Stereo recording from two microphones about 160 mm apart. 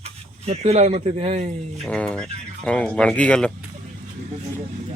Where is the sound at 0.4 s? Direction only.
40° right (ahead or behind).